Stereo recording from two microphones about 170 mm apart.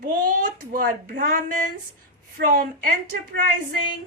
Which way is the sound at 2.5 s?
55° right (ahead or behind).